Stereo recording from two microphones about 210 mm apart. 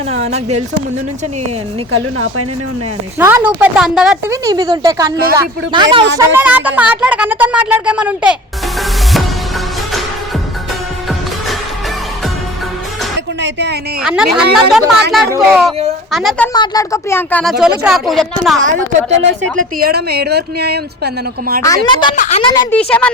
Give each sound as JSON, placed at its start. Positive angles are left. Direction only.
{"t": 0.3, "sound": "speech", "side_deg": -30}
{"t": 1.9, "sound": "speech", "side_deg": -80}
{"t": 3.2, "sound": "speech", "side_deg": -10}
{"t": 4.3, "sound": "speech", "side_deg": -20}
{"t": 6.1, "sound": "speech", "side_deg": -10}
{"t": 13.4, "sound": "a sound", "side_deg": -55}
{"t": 14.0, "sound": "speech", "side_deg": -5}
{"t": 16.5, "sound": "speech", "side_deg": 15}
{"t": 17.6, "sound": "speech", "side_deg": -5}
{"t": 18.7, "sound": "speech", "side_deg": -30}
{"t": 19.8, "sound": "speech", "side_deg": -50}
{"t": 21.8, "sound": "speech", "side_deg": 20}
{"t": 22.1, "sound": "a woman's voice", "side_deg": 35}
{"t": 22.9, "sound": "speech", "side_deg": 5}